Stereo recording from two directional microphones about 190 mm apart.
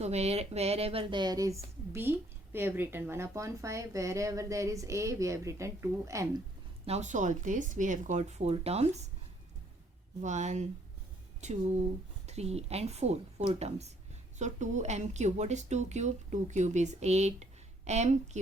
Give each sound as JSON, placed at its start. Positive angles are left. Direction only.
{"t": 0.0, "sound": "speech", "side_deg": -35}
{"t": 6.8, "sound": "speech", "side_deg": -35}
{"t": 10.2, "sound": "speech", "side_deg": -40}